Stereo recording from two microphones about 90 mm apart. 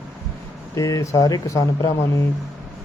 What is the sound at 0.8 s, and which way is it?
Speech, 40° left (ahead or behind).